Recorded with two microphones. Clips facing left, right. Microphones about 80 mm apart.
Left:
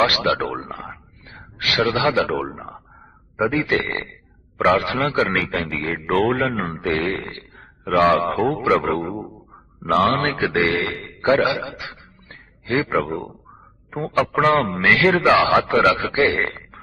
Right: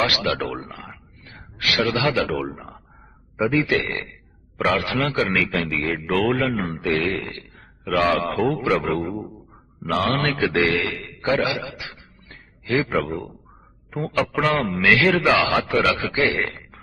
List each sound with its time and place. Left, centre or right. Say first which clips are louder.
0.0 s a man's voice: left 4 dB; left
9.8 s a man's voice: left 4 dB; left
14.2 s a man's voice: left 4 dB; left